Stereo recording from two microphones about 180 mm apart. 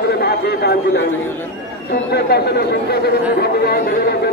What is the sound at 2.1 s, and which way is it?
Speech, 65° left (ahead or behind).